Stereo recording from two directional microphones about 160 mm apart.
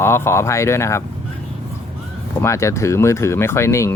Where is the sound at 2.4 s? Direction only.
15° left (ahead or behind).